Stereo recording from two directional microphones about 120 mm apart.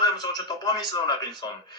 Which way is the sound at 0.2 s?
35° left (ahead or behind).